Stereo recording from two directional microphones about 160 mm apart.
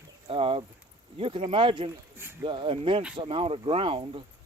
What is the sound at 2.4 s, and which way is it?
Speech, 30° right (ahead or behind).